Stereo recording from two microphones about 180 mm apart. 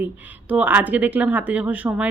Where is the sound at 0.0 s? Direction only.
10° right (ahead or behind).